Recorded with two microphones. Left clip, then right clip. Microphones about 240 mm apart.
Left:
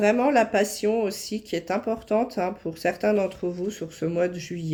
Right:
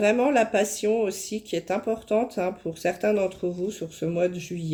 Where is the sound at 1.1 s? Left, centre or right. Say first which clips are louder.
Even; left.